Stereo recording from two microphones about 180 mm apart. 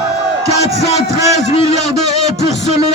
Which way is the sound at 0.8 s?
35° left (ahead or behind).